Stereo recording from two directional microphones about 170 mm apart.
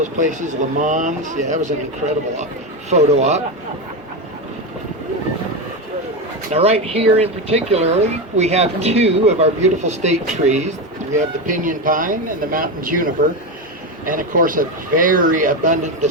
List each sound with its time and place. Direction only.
0.0 s speech: 45° right (ahead or behind)
6.5 s speech: 35° right (ahead or behind)